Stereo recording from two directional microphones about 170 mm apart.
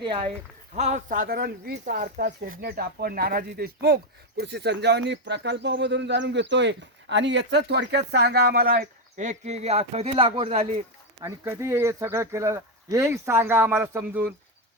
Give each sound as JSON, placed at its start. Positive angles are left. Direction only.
{"t": 0.0, "sound": "speech", "side_deg": -30}
{"t": 0.7, "sound": "speech", "side_deg": -40}
{"t": 11.2, "sound": "speech", "side_deg": -15}